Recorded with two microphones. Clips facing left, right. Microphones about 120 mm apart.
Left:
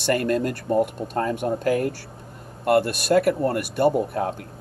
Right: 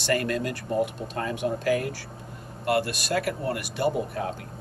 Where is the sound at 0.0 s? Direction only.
50° left (ahead or behind).